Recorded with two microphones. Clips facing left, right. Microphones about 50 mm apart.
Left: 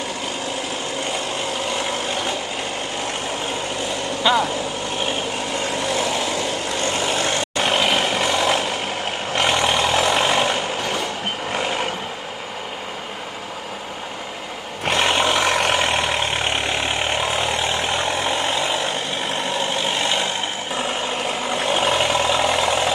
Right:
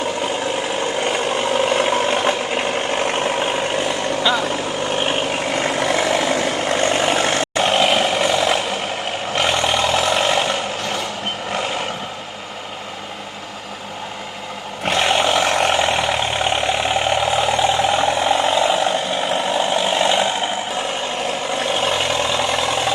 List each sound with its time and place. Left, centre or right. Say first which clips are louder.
1.0 s vehicle: right 6 dB; right
4.3 s speech: left 2 dB; centre
5.5 s vehicle: right 4 dB; right
7.5 s a sound: right 3 dB; centre
9.3 s vehicle: even; centre
14.8 s vehicle: right 1 dB; centre
19.7 s mechanisms: right 5 dB; centre
21.2 s vehicle: right 1 dB; centre